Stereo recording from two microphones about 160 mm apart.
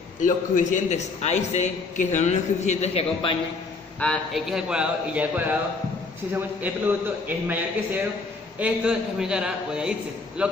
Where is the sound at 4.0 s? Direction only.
5° left (ahead or behind).